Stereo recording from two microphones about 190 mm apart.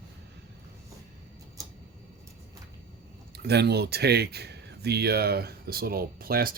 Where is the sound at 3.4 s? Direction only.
60° right (ahead or behind).